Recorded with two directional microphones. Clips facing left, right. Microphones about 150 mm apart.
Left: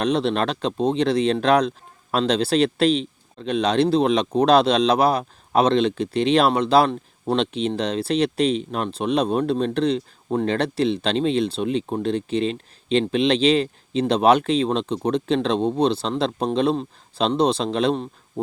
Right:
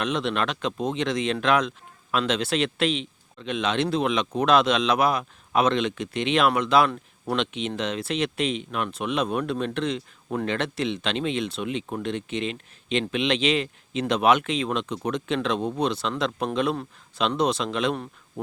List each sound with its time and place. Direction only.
0.0 s speech: 35° left (ahead or behind)